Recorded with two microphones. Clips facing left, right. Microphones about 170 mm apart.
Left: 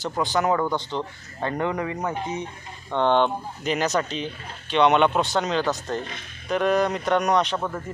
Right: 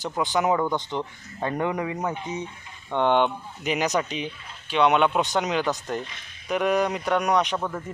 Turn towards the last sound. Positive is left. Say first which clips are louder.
# left 1 dB
turn(degrees=0)  # may be behind; listen again after turning